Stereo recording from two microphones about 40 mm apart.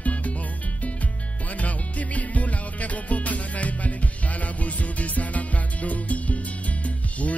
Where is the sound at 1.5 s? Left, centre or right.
Left.